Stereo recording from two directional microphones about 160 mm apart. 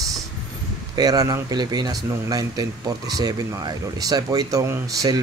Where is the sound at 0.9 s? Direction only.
25° right (ahead or behind).